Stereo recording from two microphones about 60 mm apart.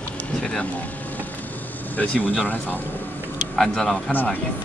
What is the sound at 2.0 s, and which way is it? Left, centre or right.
Speech, left.